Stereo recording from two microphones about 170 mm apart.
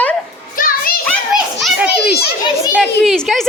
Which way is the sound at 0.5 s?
55° left (ahead or behind).